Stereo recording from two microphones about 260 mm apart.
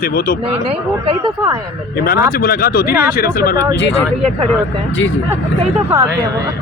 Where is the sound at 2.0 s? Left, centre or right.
Left.